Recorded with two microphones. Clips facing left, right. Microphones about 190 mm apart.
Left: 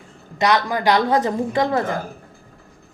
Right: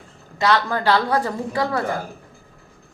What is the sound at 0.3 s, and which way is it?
A woman's voice, 15° left (ahead or behind).